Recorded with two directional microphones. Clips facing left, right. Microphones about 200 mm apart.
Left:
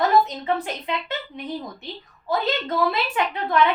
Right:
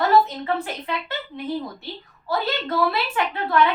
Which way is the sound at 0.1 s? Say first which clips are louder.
Right 1 dB; 15° left (ahead or behind).